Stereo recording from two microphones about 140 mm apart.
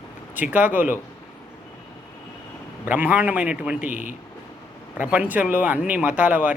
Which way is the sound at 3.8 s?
75° right (ahead or behind).